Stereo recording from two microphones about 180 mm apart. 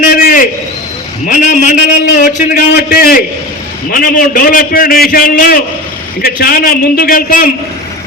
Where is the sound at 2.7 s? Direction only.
60° left (ahead or behind).